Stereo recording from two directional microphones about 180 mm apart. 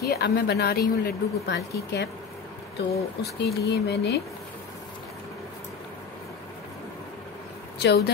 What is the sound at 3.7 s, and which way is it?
Speech, 65° left (ahead or behind).